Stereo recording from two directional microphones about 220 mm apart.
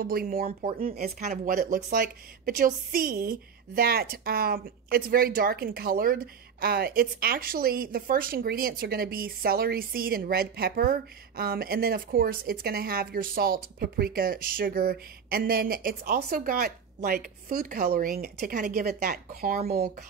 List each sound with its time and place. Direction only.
0.0 s speech: 40° right (ahead or behind)